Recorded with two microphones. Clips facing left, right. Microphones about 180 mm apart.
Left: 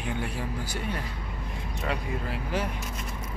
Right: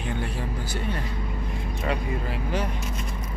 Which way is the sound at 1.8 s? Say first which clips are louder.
Right 3 dB; centre (ahead or behind).